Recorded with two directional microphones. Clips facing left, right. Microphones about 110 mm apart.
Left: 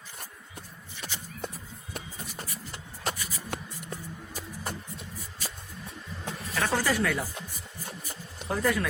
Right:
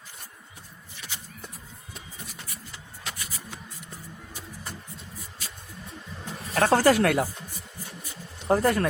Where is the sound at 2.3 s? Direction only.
45° left (ahead or behind).